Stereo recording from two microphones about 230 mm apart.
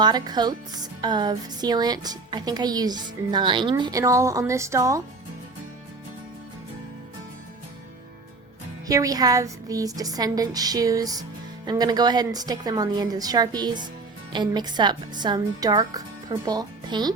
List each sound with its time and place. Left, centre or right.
0.0 s speech: centre
8.9 s speech: centre